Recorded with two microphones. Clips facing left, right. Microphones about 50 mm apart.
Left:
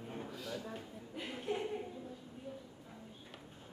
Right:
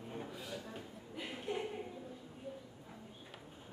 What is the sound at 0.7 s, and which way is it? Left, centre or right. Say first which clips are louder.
Chuckle: left 1 dB; centre.